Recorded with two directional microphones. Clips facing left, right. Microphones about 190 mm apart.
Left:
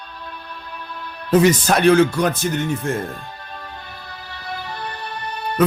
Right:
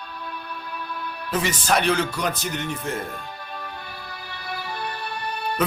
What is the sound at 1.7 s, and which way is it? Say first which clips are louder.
Speech: left 4 dB; 50° left (ahead or behind).